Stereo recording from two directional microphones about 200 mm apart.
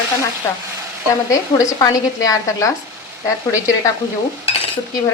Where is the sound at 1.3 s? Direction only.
15° left (ahead or behind).